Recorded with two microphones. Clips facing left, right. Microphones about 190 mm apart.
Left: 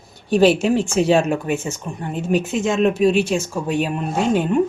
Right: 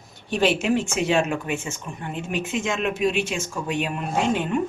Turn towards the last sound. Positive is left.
turn(degrees=40)  # may be behind; listen again after turning